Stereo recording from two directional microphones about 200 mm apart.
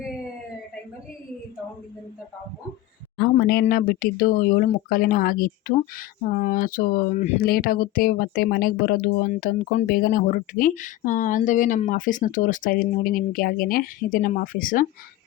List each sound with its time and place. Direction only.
3.2 s speech: 50° left (ahead or behind)